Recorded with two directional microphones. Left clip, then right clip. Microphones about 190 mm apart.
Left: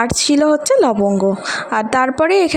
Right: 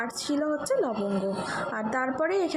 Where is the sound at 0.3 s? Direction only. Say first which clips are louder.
Left 13 dB; 50° left (ahead or behind).